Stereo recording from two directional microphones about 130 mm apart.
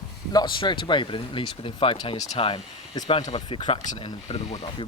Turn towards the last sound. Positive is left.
turn(degrees=45)  # may be behind; listen again after turning